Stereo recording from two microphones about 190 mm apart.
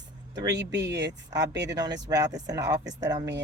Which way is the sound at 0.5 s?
65° right (ahead or behind).